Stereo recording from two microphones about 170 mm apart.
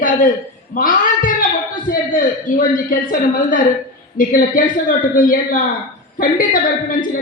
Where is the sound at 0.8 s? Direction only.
55° left (ahead or behind).